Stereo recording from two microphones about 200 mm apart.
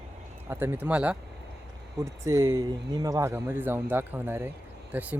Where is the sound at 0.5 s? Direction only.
10° right (ahead or behind).